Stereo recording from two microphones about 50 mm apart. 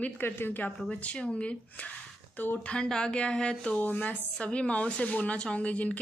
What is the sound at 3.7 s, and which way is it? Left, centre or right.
Speech, left.